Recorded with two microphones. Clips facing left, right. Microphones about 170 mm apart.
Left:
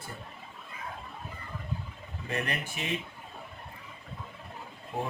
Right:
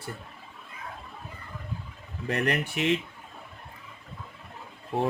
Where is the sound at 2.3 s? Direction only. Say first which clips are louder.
Right 6 dB; 70° right (ahead or behind).